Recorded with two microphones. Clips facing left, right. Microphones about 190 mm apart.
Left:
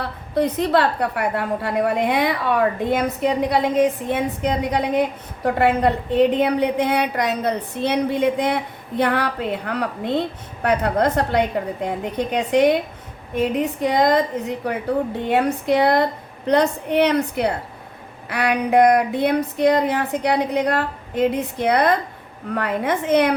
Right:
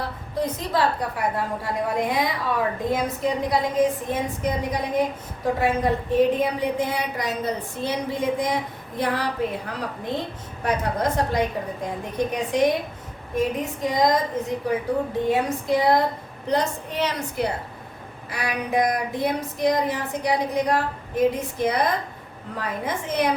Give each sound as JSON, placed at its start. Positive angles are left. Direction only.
{"t": 0.0, "sound": "a woman's voice", "side_deg": 65}